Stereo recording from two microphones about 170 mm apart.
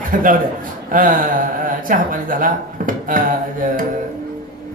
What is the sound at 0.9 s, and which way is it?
Speech, 50° right (ahead or behind).